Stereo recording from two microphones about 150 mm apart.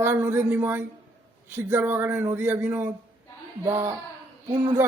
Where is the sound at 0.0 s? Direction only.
15° right (ahead or behind).